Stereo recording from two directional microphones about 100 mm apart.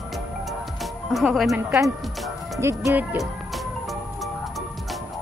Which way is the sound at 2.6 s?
25° right (ahead or behind).